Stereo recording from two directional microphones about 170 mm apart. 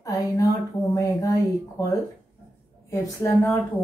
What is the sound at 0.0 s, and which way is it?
Speech, 20° left (ahead or behind).